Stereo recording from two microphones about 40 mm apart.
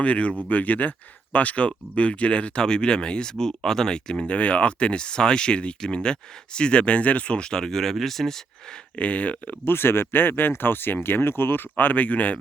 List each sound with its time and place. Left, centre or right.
0.0 s speech: left
0.4 s speech: left
2.6 s speech: left
9.0 s speech: left
9.6 s speech: left
11.8 s speech: left